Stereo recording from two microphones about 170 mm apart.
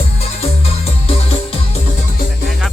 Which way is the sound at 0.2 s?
35° left (ahead or behind).